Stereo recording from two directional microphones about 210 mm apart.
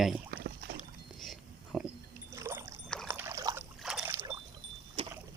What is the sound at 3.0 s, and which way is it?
Rowboat, 15° right (ahead or behind).